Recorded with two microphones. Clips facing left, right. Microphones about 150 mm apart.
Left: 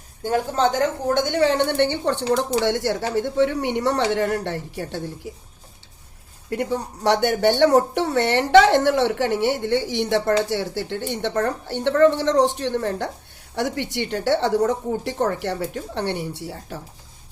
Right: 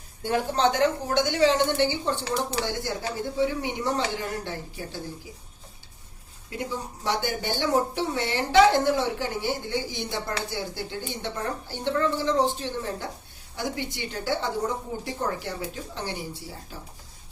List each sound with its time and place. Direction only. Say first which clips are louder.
0.2 s speech: left 3 dB; 40° left (ahead or behind); by 5.3 s 70° left (ahead or behind)
6.5 s speech: left 8 dB; 70° left (ahead or behind)